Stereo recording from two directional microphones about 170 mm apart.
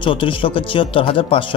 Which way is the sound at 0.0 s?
30° left (ahead or behind).